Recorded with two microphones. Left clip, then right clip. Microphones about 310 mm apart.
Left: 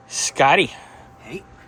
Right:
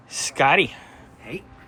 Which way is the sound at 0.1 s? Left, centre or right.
Centre.